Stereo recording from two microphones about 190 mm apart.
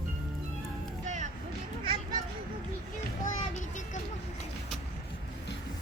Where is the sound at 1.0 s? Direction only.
40° right (ahead or behind).